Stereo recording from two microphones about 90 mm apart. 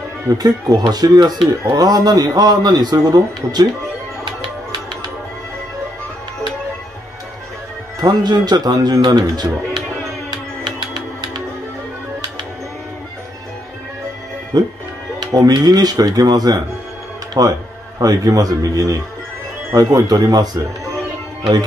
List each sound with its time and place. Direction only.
0.4 s a man's voice: 45° right (ahead or behind)
8.0 s a man's voice: 50° right (ahead or behind)
14.5 s a man's voice: 45° right (ahead or behind)